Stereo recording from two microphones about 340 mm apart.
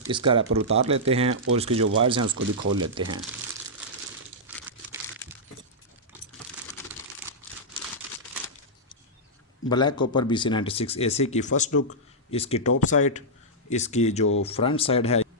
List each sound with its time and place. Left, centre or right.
0.1 s speech: centre
4.4 s crumpling: centre
7.2 s crumpling: centre
9.6 s speech: centre